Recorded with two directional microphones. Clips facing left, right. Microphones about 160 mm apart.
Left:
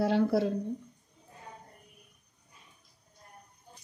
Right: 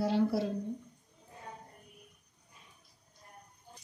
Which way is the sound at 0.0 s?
60° left (ahead or behind).